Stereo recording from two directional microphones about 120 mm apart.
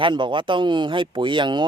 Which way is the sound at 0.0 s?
40° right (ahead or behind).